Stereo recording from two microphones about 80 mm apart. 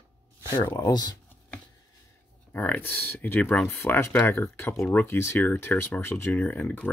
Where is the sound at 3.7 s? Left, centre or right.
Left.